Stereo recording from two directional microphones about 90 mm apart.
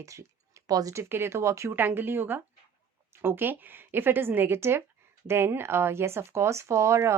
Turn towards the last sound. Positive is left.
turn(degrees=-30)  # may be behind; listen again after turning